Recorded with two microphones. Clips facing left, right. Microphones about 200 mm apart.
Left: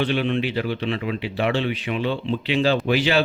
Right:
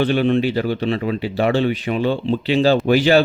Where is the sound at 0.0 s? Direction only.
40° right (ahead or behind).